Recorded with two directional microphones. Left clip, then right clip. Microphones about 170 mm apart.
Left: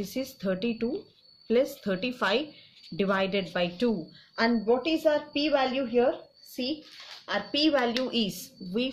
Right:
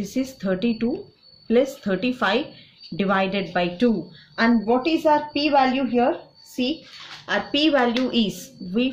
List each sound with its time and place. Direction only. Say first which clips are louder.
0.0 s a woman's voice: right 5 dB; 30° left (ahead or behind)
6.5 s a child's voice: right 7 dB; 20° left (ahead or behind)